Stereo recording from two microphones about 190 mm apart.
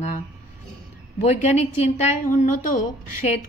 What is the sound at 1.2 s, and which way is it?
A woman's voice, 35° left (ahead or behind).